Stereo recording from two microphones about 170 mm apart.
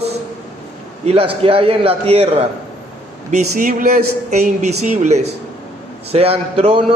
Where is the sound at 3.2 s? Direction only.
45° right (ahead or behind).